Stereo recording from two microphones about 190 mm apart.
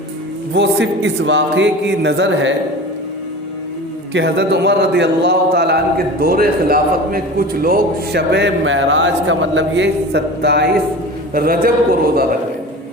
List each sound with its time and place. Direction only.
0.5 s speech: 65° right (ahead or behind)
4.1 s a man's voice: 65° right (ahead or behind)
11.3 s a man's voice: 50° right (ahead or behind)